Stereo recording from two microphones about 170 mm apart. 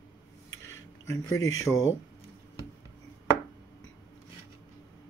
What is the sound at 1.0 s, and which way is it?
Speech, 20° left (ahead or behind).